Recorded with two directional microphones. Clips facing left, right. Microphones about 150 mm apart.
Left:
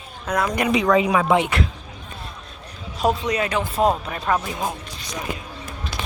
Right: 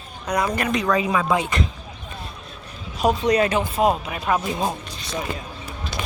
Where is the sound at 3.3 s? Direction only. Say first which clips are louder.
Right 5 dB; 35° right (ahead or behind).